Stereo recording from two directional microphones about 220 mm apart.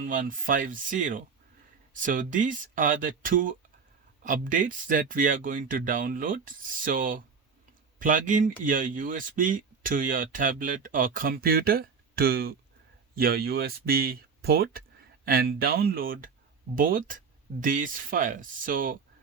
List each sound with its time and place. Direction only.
0.0 s speech: 40° right (ahead or behind)